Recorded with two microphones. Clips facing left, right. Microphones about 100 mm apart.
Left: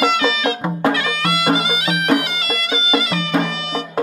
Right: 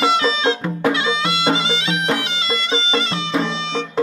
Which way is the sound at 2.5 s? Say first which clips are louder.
Left 1 dB; 30° right (ahead or behind).